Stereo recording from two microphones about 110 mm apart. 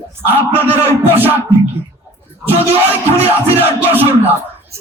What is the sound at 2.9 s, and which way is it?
Music, 20° right (ahead or behind).